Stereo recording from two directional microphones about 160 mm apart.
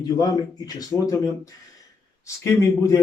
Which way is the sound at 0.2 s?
25° left (ahead or behind).